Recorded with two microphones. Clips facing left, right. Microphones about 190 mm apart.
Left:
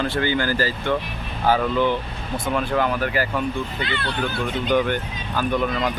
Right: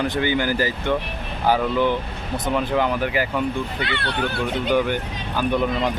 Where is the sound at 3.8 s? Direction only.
65° right (ahead or behind).